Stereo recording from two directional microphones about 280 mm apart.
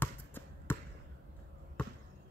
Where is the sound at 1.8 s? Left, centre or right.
Centre.